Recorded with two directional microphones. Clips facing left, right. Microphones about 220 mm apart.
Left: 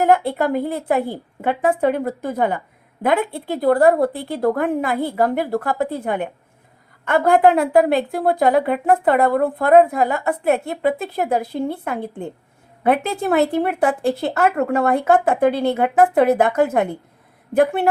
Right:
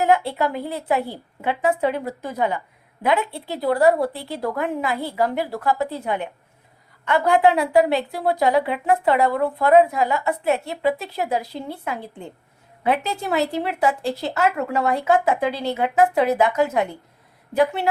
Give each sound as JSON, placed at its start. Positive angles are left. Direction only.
{"t": 0.0, "sound": "a woman's voice", "side_deg": 50}